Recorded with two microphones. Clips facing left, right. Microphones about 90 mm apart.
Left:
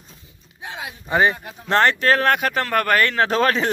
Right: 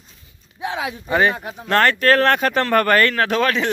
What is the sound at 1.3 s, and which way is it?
Speech, 55° right (ahead or behind).